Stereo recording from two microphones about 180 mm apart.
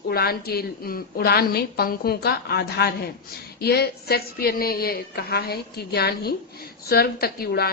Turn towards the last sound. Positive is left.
turn(degrees=60)  # may be behind; listen again after turning